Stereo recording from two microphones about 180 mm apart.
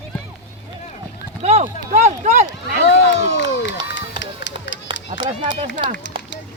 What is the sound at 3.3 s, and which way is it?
Crowd, 90° left.